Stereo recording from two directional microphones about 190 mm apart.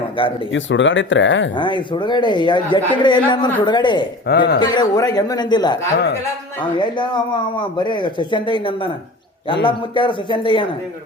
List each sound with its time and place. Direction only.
0.2 s speech: 25° left (ahead or behind)
0.5 s speech: 75° left (ahead or behind)
1.5 s speech: 25° left (ahead or behind)
4.3 s speech: 60° left (ahead or behind)
4.6 s speech: 20° left (ahead or behind)